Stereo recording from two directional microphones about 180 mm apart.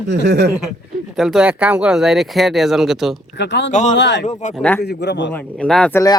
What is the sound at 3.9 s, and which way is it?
Speech, 80° left.